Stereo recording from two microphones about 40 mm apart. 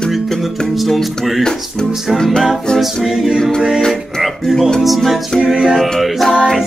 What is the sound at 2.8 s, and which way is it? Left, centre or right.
A capella, centre.